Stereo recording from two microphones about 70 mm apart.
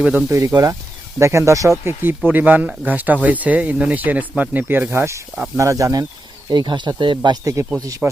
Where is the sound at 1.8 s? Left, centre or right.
Right.